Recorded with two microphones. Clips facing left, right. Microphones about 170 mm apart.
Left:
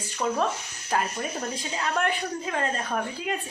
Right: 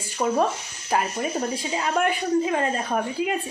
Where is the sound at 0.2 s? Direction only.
20° right (ahead or behind).